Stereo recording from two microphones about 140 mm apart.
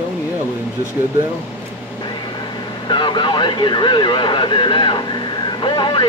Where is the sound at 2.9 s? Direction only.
35° left (ahead or behind).